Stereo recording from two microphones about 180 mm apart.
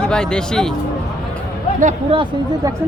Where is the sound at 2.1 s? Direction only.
25° right (ahead or behind).